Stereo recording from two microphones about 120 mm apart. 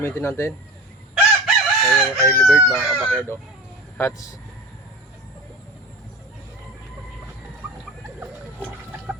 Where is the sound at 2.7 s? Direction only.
Centre (ahead or behind).